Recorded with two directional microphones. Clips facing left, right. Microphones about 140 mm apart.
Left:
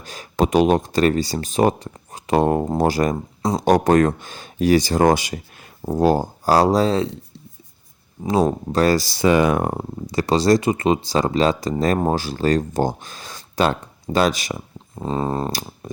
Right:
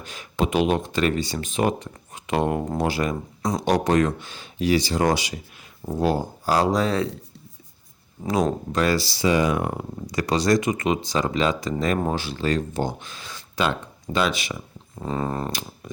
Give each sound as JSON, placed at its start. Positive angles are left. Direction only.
{"t": 0.0, "sound": "speech", "side_deg": 40}
{"t": 8.7, "sound": "speech", "side_deg": 40}
{"t": 9.6, "sound": "speech", "side_deg": 30}
{"t": 14.9, "sound": "a sound", "side_deg": 25}